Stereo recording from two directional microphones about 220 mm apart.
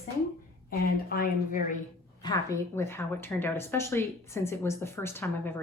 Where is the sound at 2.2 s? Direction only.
15° left (ahead or behind).